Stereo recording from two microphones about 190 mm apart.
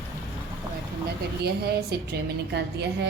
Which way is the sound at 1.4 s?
55° right (ahead or behind).